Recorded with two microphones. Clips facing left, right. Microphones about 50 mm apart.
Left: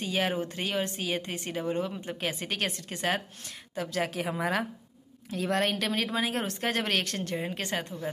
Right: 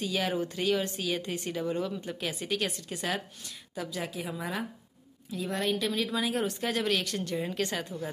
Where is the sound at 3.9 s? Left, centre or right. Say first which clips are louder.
Left 7 dB; left.